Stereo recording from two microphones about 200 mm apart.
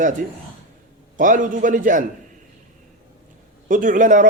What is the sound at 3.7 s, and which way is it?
Speech, 40° right (ahead or behind).